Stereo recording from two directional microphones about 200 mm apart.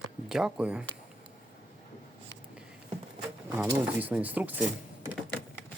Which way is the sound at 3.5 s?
10° right (ahead or behind).